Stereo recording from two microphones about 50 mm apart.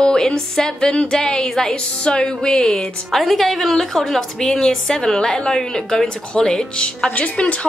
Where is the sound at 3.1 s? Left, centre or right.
Centre.